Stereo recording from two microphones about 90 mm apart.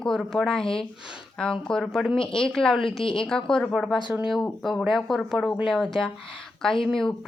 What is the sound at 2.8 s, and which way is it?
Speech, 75° left (ahead or behind).